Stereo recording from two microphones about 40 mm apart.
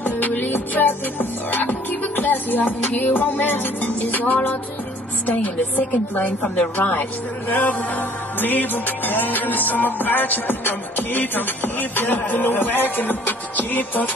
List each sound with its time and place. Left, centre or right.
0.0 s music: left
5.2 s speech: left